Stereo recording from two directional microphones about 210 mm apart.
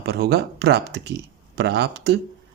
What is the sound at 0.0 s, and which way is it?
Speech, 50° right (ahead or behind).